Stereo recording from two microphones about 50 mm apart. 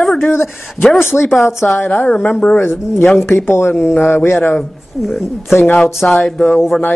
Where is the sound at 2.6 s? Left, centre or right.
Left.